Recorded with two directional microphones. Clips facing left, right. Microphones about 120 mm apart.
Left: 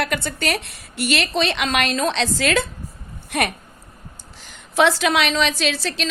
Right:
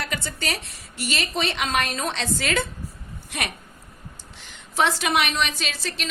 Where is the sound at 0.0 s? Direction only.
65° left (ahead or behind); by 2.6 s 90° left.